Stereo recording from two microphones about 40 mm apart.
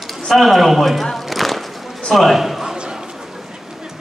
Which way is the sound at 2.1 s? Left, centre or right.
Centre.